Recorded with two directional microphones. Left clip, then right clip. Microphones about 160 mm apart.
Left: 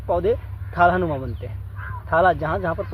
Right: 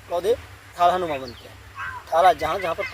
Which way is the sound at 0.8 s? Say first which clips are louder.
Left 2 dB; 20° right (ahead or behind).